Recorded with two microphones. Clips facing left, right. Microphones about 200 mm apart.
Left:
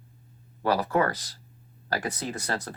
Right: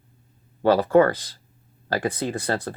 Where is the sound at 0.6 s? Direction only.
30° right (ahead or behind).